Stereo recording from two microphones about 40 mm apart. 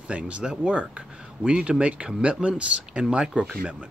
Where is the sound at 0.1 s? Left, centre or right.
Right.